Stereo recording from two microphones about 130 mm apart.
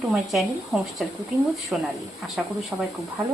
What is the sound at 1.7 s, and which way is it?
Speech, 5° right (ahead or behind).